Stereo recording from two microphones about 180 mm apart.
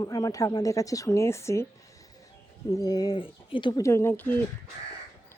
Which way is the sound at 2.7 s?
20° left (ahead or behind).